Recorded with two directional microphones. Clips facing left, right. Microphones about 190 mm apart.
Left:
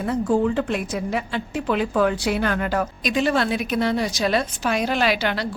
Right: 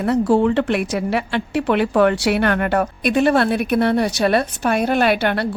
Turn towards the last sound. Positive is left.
turn(degrees=-55)  # may be behind; listen again after turning